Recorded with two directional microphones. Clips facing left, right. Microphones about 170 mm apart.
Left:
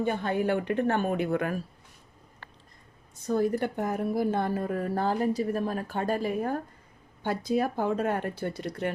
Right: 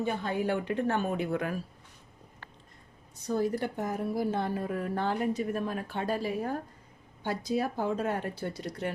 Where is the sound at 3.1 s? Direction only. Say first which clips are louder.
Left 3 dB; 55° left (ahead or behind).